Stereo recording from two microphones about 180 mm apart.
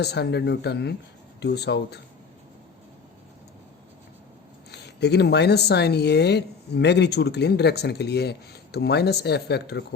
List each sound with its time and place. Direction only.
0.0 s speech: 65° left (ahead or behind)
4.7 s speech: 65° left (ahead or behind)